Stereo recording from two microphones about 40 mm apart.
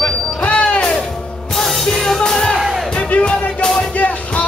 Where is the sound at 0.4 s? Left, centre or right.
Left.